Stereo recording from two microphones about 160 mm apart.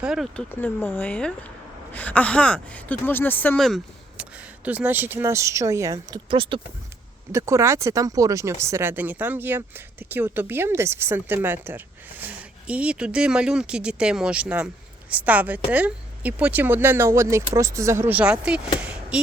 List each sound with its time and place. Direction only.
0.0 s speech: centre (ahead or behind)
0.6 s a woman's voice: 15° left (ahead or behind)
4.2 s speech: 10° right (ahead or behind); by 6.6 s 30° right (ahead or behind)
7.3 s speech: 15° right (ahead or behind)
18.8 s a sound: 5° right (ahead or behind)